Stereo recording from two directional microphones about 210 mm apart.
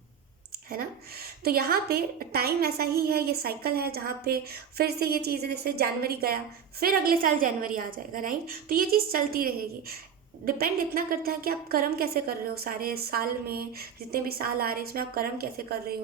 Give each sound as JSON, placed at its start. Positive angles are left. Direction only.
{"t": 0.7, "sound": "a woman's voice", "side_deg": -45}